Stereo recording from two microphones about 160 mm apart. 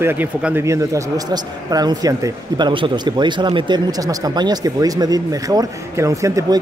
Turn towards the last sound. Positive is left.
turn(degrees=-20)  # may be behind; listen again after turning